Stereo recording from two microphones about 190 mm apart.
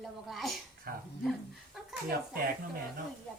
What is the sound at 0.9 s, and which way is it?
Speech, 50° right (ahead or behind).